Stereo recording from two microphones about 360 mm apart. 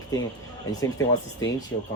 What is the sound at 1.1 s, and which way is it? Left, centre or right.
Speech, left.